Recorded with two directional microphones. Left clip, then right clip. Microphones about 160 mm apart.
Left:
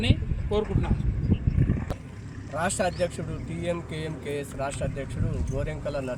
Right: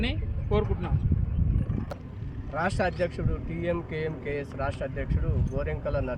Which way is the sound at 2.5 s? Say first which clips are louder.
Left 1 dB; 10° left (ahead or behind).